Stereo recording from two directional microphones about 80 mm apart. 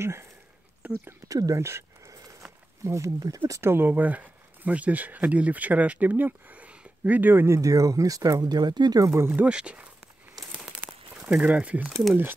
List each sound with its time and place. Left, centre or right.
0.0 s speech: right
0.8 s a sound: centre
1.3 s speech: right
3.7 s speech: right
7.4 s speech: right
9.0 s speech: right
9.3 s speech: centre
10.9 s a sound: centre